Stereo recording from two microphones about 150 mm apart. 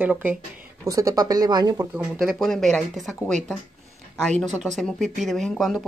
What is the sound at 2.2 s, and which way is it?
Speech, centre (ahead or behind).